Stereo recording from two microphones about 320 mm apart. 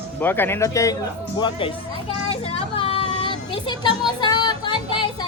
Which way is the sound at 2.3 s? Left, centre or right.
Centre.